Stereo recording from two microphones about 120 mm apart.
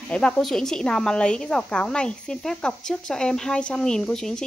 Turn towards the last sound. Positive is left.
turn(degrees=5)  # may be behind; listen again after turning